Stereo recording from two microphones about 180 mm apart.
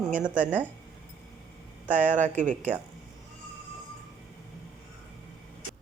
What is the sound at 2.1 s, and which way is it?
Speech, 45° right (ahead or behind).